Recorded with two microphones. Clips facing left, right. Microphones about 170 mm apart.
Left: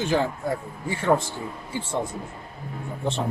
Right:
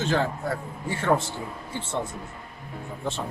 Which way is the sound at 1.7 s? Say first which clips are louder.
Left 3 dB; 10° left (ahead or behind).